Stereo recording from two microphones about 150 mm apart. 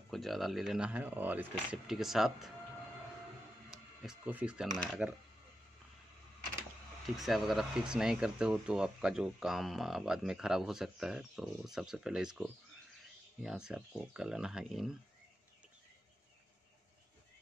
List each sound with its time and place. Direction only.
0.1 s speech: centre (ahead or behind)
3.7 s camera: 5° right (ahead or behind)
5.0 s speech: 10° right (ahead or behind)
7.2 s speech: centre (ahead or behind)